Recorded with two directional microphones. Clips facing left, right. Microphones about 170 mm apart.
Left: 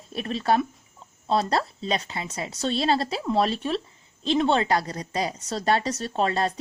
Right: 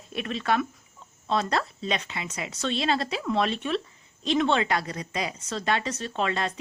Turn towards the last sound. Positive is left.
turn(degrees=35)  # may be behind; listen again after turning